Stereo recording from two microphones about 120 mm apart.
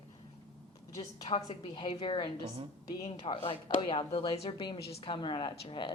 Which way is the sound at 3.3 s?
45° left (ahead or behind).